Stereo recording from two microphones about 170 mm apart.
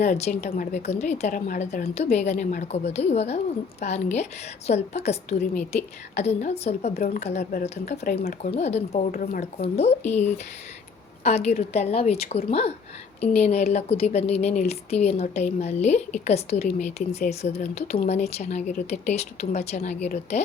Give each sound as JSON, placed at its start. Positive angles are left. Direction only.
{"t": 0.0, "sound": "a woman's voice", "side_deg": 40}
{"t": 2.1, "sound": "speech", "side_deg": 40}
{"t": 6.9, "sound": "speech", "side_deg": 60}
{"t": 7.2, "sound": "a woman's voice", "side_deg": 40}
{"t": 8.1, "sound": "speech", "side_deg": 65}
{"t": 8.4, "sound": "speech", "side_deg": 40}
{"t": 9.1, "sound": "speech", "side_deg": 60}
{"t": 9.4, "sound": "speech", "side_deg": 40}